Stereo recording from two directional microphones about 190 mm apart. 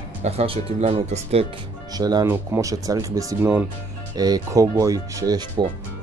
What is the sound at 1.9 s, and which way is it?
Speech, 20° right (ahead or behind).